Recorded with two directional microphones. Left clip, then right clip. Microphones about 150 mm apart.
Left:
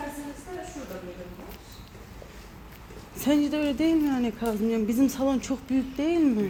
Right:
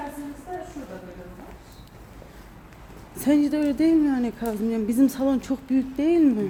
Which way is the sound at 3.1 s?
25° right (ahead or behind).